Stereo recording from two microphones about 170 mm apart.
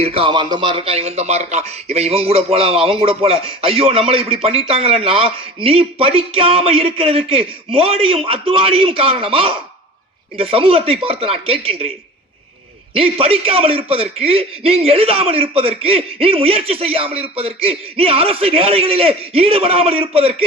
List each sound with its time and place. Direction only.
0.0 s a man's voice: 35° right (ahead or behind)
12.9 s a man's voice: 35° right (ahead or behind)